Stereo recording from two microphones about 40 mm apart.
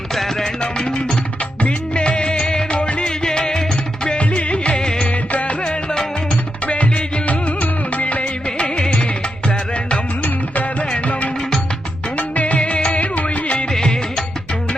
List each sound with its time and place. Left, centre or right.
0.1 s music: centre
0.6 s music: left
3.0 s music: centre
4.2 s music: left
5.0 s music of bollywood: left
6.7 s music: left
10.2 s music: left
13.7 s music: centre